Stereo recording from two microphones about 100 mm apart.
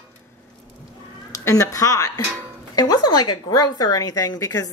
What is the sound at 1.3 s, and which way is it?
A woman's voice, 35° left (ahead or behind).